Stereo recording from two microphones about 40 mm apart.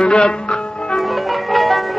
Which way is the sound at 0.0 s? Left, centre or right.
Left.